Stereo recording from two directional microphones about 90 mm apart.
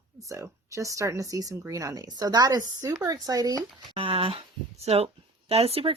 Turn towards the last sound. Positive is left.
turn(degrees=-90)